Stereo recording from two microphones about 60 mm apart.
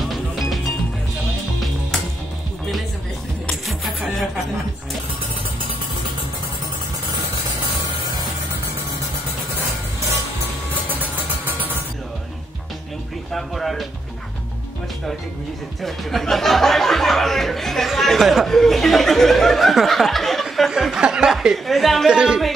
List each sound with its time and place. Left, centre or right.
0.1 s music: centre
3.6 s music: centre
10.9 s vehicle: right
13.3 s a sound: centre
15.8 s a sound: centre
21.0 s chuckle: centre
22.0 s speech: centre